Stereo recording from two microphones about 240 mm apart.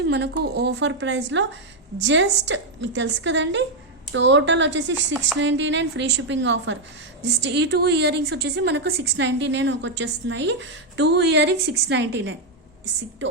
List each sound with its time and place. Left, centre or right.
0.0 s a woman's voice: right